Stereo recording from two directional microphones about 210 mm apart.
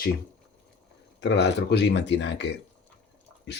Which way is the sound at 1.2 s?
55° left (ahead or behind).